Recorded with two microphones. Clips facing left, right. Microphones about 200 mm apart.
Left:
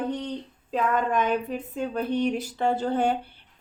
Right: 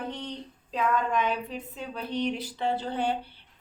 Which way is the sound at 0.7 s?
50° left (ahead or behind).